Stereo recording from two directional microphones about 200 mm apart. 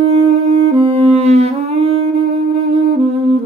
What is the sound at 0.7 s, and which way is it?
Music, 30° right (ahead or behind).